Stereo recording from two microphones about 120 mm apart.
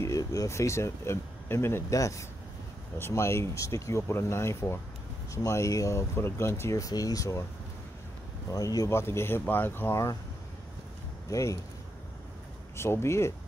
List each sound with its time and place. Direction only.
0.0 s speech: 25° left (ahead or behind)
8.5 s speech: 30° left (ahead or behind)
11.2 s speech: 25° left (ahead or behind)
12.7 s speech: 20° left (ahead or behind)